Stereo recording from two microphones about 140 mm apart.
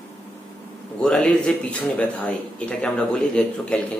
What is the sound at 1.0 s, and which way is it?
A man's voice, 5° left (ahead or behind).